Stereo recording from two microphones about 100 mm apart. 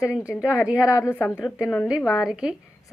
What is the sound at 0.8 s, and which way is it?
Speech, 30° left (ahead or behind).